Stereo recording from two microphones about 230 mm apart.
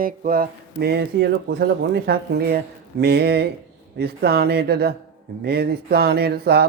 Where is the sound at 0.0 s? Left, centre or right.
Right.